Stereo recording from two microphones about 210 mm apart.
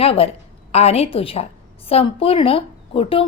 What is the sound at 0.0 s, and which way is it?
A woman's voice, 25° left (ahead or behind).